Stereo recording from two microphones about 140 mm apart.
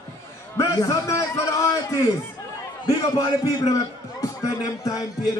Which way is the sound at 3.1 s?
25° left (ahead or behind).